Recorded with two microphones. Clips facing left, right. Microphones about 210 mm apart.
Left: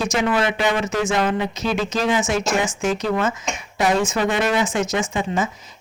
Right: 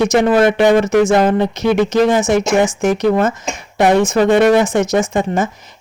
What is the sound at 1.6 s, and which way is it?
Speech, 65° right (ahead or behind).